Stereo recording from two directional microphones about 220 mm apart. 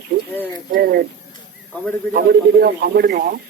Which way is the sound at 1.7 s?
5° left (ahead or behind).